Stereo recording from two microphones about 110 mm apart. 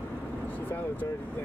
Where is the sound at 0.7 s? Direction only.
15° left (ahead or behind).